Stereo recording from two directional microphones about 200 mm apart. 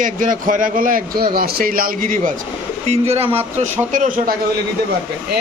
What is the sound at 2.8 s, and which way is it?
Speech, 30° right (ahead or behind).